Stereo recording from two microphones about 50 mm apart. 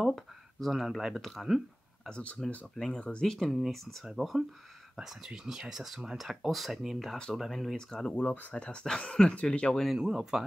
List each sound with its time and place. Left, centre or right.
0.0 s speech: centre
2.0 s speech: left
2.7 s speech: centre
4.9 s speech: centre
8.1 s speech: left
8.5 s speech: left
9.9 s speech: centre